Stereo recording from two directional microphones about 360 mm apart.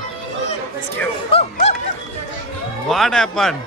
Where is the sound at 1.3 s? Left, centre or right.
Centre.